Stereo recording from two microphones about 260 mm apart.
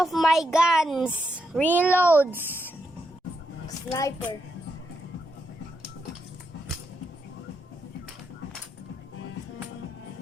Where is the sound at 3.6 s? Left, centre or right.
Centre.